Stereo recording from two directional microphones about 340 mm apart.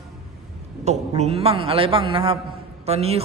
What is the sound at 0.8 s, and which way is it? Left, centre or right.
A man's voice, centre.